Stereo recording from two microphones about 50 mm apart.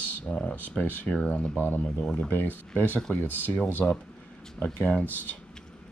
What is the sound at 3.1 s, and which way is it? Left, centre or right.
Speech, left.